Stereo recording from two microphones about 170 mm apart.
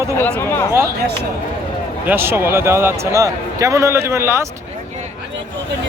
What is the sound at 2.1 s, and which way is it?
Speech, 15° right (ahead or behind).